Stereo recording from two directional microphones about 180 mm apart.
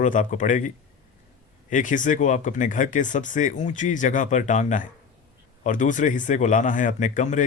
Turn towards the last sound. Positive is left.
turn(degrees=45)  # may be behind; listen again after turning